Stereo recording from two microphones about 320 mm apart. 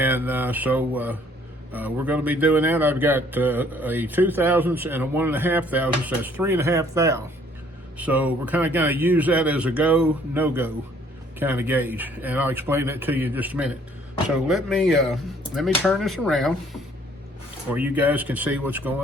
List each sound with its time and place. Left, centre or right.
0.0 s speech: centre